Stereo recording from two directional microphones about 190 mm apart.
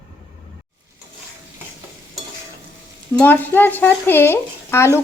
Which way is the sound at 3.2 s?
10° left (ahead or behind).